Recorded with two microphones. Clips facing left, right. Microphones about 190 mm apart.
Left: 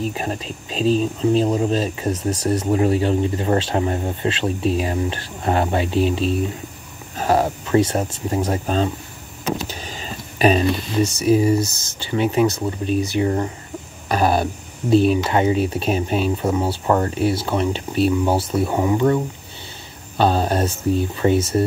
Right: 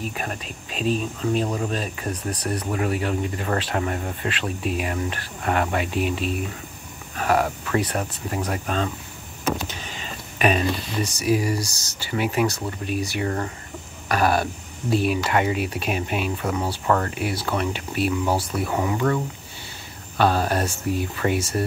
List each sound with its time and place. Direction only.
0.0 s speech: 30° left (ahead or behind)